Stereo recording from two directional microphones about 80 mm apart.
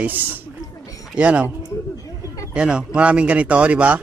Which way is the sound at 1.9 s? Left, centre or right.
Left.